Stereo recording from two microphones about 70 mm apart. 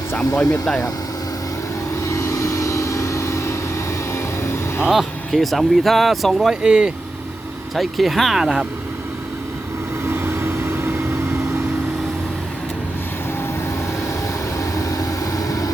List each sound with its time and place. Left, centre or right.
0.6 s speech: centre
2.0 s vehicle: left
4.9 s speech: centre
6.6 s speech: centre
7.8 s speech: centre
10.1 s vehicle: right
14.8 s vehicle: left